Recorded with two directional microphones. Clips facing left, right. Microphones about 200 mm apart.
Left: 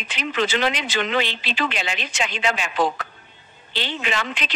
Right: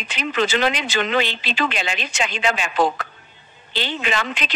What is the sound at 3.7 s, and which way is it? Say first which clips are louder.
Speech: right 2 dB; 45° right (ahead or behind).